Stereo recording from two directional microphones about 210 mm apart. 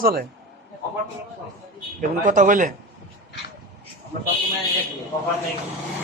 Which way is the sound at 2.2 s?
35° right (ahead or behind).